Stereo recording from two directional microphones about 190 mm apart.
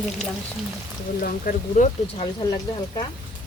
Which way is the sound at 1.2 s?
50° left (ahead or behind).